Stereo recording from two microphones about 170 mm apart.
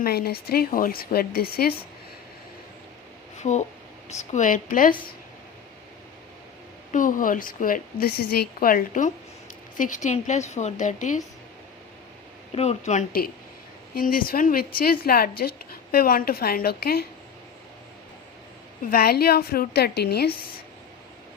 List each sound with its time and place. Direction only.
0.0 s a woman's voice: 65° left (ahead or behind)
3.4 s a woman's voice: 45° left (ahead or behind)
6.9 s a woman's voice: 50° left (ahead or behind)
12.5 s a woman's voice: 40° left (ahead or behind); by 17.1 s 65° left (ahead or behind)
18.9 s a woman's voice: 60° left (ahead or behind)